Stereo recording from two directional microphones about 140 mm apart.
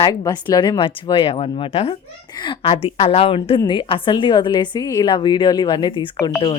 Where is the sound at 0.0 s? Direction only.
30° left (ahead or behind).